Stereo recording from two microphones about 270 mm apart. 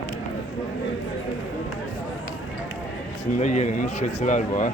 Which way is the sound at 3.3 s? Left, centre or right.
Left.